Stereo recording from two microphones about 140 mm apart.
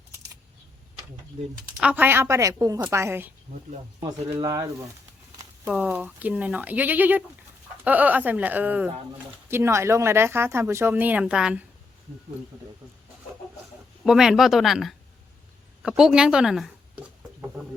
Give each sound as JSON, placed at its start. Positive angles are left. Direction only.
{"t": 1.8, "sound": "a woman's voice", "side_deg": -10}
{"t": 4.2, "sound": "speech", "side_deg": -45}
{"t": 4.4, "sound": "a woman's voice", "side_deg": -30}
{"t": 5.7, "sound": "speech", "side_deg": -10}
{"t": 14.0, "sound": "speech", "side_deg": -5}